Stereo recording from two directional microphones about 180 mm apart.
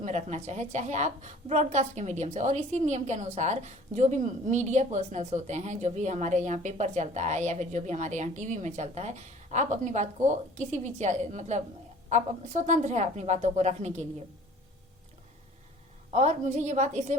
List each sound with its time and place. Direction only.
0.0 s a woman's voice: 40° right (ahead or behind)
16.1 s a woman's voice: 40° right (ahead or behind)